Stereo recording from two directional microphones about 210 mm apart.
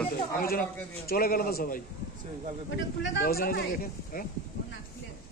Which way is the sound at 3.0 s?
50° left (ahead or behind).